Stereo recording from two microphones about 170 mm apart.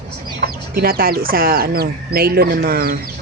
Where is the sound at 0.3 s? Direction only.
65° right (ahead or behind).